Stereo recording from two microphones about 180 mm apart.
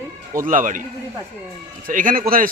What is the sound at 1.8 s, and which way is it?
Speech, 50° right (ahead or behind).